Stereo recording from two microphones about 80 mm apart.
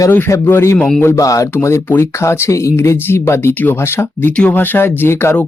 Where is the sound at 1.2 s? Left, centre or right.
Left.